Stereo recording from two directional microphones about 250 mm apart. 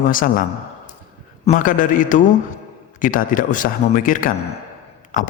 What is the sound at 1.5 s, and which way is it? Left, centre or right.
Speech, left.